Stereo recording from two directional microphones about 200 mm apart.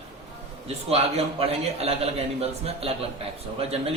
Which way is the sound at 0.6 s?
30° right (ahead or behind).